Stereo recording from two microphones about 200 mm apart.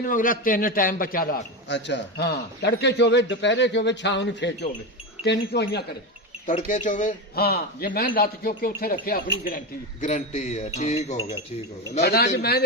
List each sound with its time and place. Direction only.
0.0 s a man's voice: 45° left (ahead or behind)
6.4 s a man's voice: 40° left (ahead or behind)
12.0 s a man's voice: 50° left (ahead or behind)